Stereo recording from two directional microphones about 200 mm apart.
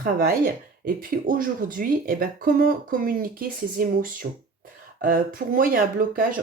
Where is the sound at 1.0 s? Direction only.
45° right (ahead or behind).